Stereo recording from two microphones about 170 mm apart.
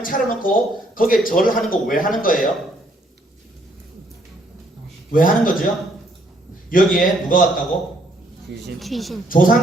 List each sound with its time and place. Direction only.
0.0 s a man's voice: 55° left (ahead or behind)
5.1 s a man's voice: 55° left (ahead or behind)
6.7 s a man's voice: 55° left (ahead or behind)
8.8 s speech: centre (ahead or behind)
9.3 s a man's voice: 55° left (ahead or behind)